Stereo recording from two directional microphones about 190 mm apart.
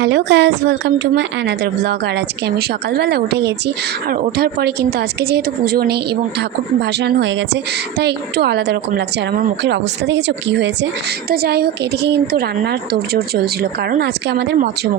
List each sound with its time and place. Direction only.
0.0 s speech: 65° right (ahead or behind)
4.1 s a woman's voice: 50° right (ahead or behind)
7.0 s speech: 65° right (ahead or behind)
11.3 s speech: 55° right (ahead or behind)